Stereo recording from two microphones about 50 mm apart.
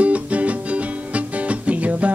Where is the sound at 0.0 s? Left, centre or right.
Right.